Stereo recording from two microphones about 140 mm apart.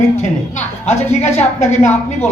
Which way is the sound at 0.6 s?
55° left (ahead or behind).